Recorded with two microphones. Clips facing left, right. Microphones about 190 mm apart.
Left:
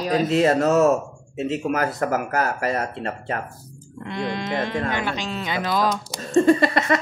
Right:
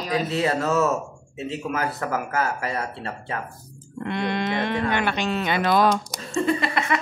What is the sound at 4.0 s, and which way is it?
Speech, 60° right (ahead or behind).